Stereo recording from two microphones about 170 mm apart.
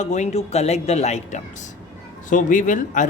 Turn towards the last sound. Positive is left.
turn(degrees=50)  # may be behind; listen again after turning